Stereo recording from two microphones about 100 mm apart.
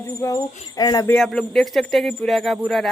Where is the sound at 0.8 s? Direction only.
45° left (ahead or behind).